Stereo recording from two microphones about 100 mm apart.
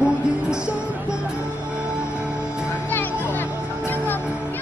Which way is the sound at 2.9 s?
20° left (ahead or behind).